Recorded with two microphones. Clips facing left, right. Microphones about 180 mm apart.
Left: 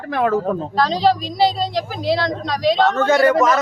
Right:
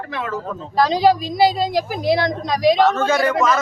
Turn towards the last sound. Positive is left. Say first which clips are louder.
# left 3 dB
turn(degrees=20)  # may be behind; listen again after turning